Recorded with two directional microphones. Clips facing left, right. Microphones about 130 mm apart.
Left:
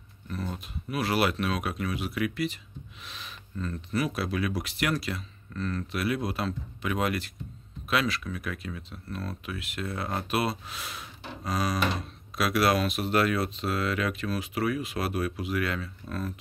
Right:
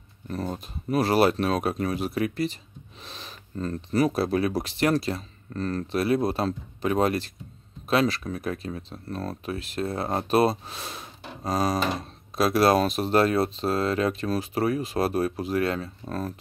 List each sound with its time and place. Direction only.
0.3 s speech: 40° right (ahead or behind)